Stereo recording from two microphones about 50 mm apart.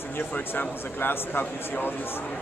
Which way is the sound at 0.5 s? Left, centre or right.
Left.